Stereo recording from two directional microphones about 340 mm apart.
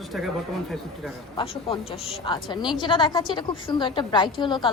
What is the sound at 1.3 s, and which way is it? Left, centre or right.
A woman's voice, centre.